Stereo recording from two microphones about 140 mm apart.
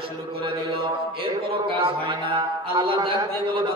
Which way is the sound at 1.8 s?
35° right (ahead or behind).